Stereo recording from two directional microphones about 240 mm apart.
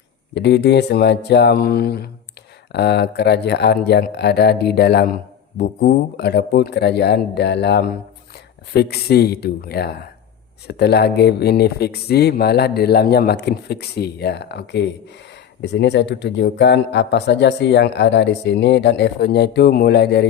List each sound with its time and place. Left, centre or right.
0.3 s speech: left